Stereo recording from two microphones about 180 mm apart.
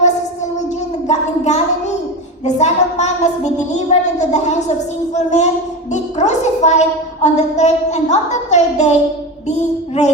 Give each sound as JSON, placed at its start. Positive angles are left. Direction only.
{"t": 1.0, "sound": "a woman's voice", "side_deg": 40}